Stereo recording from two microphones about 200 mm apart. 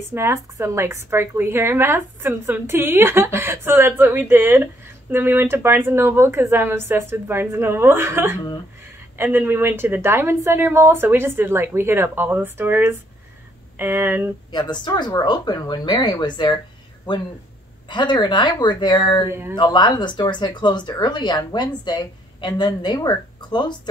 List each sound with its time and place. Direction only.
0.1 s a woman's voice: 15° right (ahead or behind)
14.5 s a woman's voice: 20° left (ahead or behind)
17.8 s a woman's voice: 25° left (ahead or behind)